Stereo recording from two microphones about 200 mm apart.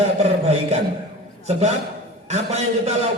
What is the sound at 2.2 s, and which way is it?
Music, 35° right (ahead or behind).